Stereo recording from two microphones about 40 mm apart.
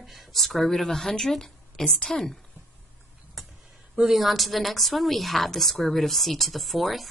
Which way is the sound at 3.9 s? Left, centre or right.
Centre.